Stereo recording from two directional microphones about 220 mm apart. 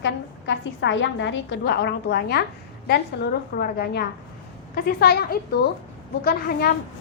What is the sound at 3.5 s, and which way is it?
A woman's voice, 45° left (ahead or behind).